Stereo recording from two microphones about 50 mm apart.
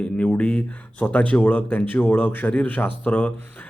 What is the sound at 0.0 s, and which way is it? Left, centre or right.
Speech, left.